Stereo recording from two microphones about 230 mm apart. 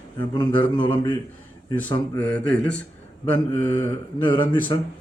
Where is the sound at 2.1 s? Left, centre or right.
Centre.